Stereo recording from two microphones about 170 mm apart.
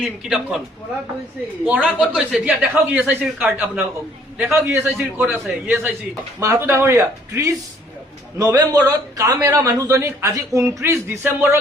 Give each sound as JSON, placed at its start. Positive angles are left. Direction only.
{"t": 0.0, "sound": "a man's voice", "side_deg": -5}
{"t": 1.6, "sound": "a man's voice", "side_deg": -10}